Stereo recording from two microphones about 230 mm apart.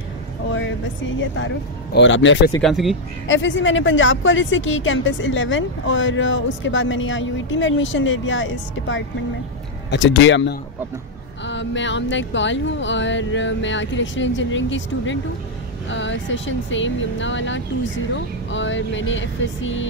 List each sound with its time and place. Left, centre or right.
0.5 s speech: left
2.0 s a sound: left
2.6 s speech: centre
3.3 s a woman's voice: left
9.8 s a sound: left
15.9 s a woman's voice: left